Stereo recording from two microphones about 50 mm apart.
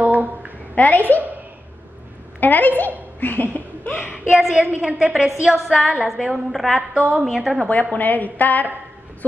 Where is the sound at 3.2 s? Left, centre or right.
Left.